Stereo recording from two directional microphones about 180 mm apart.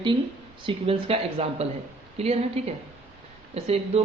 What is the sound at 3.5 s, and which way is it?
Speech, 35° right (ahead or behind).